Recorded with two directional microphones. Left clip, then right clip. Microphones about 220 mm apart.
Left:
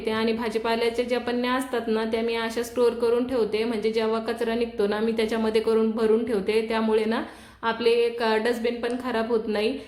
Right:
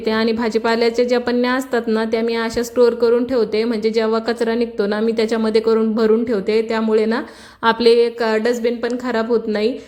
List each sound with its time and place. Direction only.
0.0 s a woman's voice: 35° right (ahead or behind)
7.6 s a woman's voice: 35° right (ahead or behind)